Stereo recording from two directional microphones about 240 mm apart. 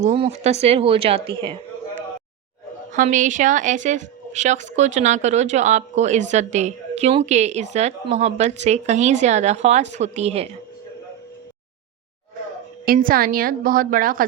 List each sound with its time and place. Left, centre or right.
0.0 s a woman's voice: right
2.9 s a woman's voice: right
12.8 s a woman's voice: right